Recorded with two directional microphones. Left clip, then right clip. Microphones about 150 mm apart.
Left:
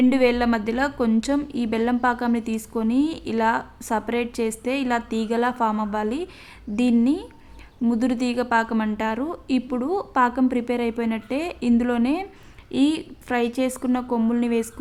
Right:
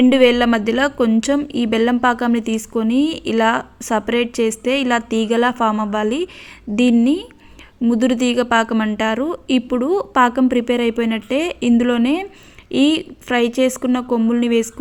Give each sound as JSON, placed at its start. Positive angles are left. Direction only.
{"t": 0.1, "sound": "a woman's voice", "side_deg": -25}